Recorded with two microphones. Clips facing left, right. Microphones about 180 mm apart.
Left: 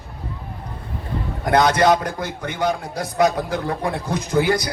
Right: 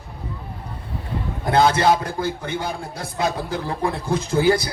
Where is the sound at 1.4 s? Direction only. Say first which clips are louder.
Left 1 dB; 25° right (ahead or behind).